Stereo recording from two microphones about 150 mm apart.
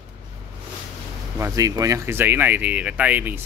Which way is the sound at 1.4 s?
20° right (ahead or behind).